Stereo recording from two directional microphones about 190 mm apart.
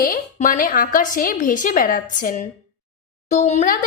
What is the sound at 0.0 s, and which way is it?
Speech, 45° left (ahead or behind).